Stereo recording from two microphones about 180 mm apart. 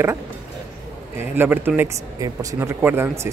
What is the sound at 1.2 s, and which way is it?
Speech, 10° right (ahead or behind).